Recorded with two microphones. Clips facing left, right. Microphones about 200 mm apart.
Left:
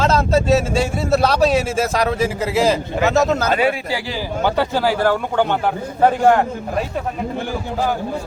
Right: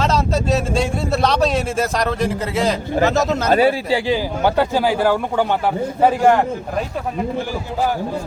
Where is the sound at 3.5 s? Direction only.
35° right (ahead or behind).